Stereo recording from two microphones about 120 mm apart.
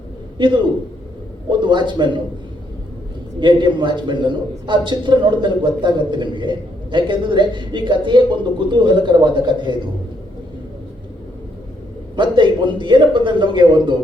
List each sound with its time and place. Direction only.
0.3 s a man's voice: 40° right (ahead or behind)
3.4 s a man's voice: 40° right (ahead or behind)
12.1 s a man's voice: 40° right (ahead or behind)